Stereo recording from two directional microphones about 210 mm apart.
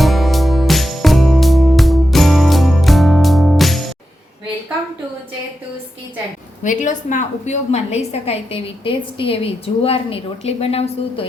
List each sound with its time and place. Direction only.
0.0 s music: centre (ahead or behind)
6.6 s a woman's voice: 35° left (ahead or behind)